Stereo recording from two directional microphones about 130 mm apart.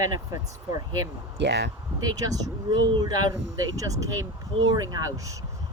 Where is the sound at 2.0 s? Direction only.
30° right (ahead or behind).